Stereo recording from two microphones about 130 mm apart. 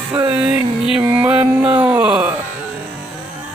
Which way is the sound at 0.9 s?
10° right (ahead or behind).